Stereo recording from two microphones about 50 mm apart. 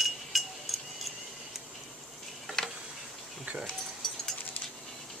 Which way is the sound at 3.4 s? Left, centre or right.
Right.